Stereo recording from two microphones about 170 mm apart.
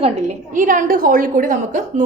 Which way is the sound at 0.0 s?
45° right (ahead or behind).